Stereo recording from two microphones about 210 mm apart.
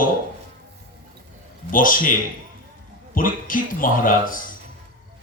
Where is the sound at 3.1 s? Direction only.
40° left (ahead or behind).